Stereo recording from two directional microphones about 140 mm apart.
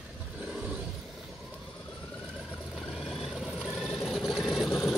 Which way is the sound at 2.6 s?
Centre (ahead or behind).